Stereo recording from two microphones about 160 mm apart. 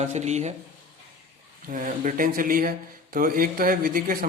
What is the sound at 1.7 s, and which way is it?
A man's voice, 55° right (ahead or behind).